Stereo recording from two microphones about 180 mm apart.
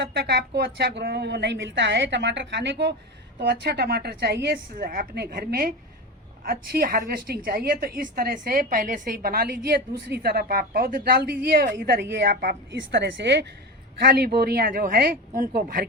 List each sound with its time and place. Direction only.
0.0 s a woman's voice: 70° right (ahead or behind)
3.4 s a woman's voice: 65° right (ahead or behind)
14.0 s a woman's voice: 60° right (ahead or behind)